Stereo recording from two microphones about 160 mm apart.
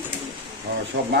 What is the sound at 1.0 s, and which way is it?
Speech, 80° right.